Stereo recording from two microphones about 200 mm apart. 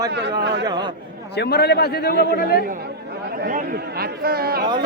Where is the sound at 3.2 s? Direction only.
50° right (ahead or behind).